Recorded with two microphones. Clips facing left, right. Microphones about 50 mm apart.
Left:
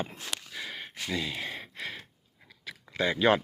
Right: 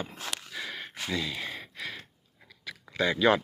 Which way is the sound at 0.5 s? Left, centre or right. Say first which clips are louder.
Right 1 dB; centre.